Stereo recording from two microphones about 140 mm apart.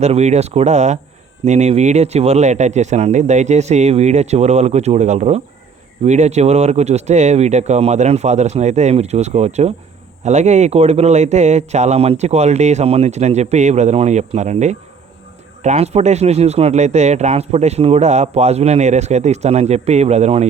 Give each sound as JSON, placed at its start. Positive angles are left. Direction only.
{"t": 0.0, "sound": "speech", "side_deg": -55}